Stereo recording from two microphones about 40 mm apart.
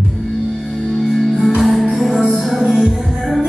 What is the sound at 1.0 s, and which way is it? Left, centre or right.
Music, centre.